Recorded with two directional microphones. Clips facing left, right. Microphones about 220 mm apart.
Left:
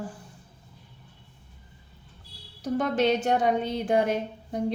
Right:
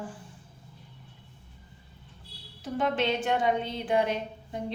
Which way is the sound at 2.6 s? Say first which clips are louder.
Left 4 dB; 40° left (ahead or behind).